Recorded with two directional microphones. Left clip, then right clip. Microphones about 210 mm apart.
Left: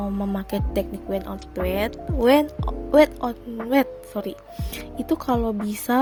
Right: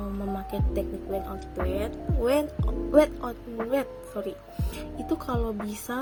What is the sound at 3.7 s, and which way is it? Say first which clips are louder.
A woman's voice: left 8 dB; 40° left (ahead or behind).